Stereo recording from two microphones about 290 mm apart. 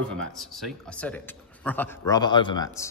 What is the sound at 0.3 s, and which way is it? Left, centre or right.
A man's voice, centre.